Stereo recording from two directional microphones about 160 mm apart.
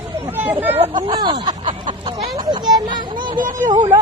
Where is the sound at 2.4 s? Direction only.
30° right (ahead or behind).